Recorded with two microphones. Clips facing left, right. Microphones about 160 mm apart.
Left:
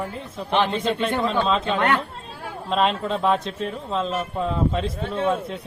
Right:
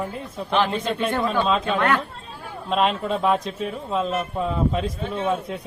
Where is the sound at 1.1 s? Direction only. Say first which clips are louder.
Right 2 dB; 20° left (ahead or behind).